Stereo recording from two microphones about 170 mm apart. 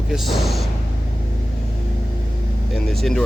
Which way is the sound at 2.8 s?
Centre (ahead or behind).